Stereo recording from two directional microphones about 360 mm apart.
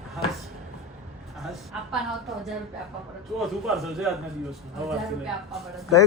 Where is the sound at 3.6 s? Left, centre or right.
Centre.